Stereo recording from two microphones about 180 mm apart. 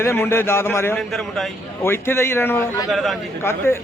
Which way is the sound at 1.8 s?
15° left (ahead or behind).